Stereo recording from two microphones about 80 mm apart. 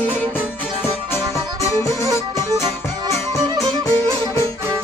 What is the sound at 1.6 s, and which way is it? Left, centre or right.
Music, left.